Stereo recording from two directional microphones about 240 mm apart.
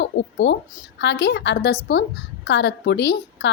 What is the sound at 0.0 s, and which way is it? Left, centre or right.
A woman's voice, left.